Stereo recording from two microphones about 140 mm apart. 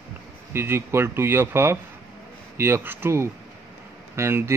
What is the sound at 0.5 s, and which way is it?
Speech, 15° right (ahead or behind).